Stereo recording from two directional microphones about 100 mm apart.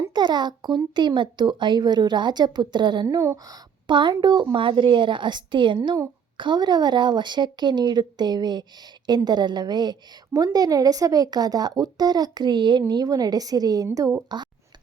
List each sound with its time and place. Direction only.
0.1 s a woman's voice: 45° right (ahead or behind)